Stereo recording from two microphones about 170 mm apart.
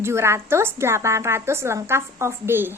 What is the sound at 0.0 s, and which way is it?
A woman's voice, 15° right (ahead or behind).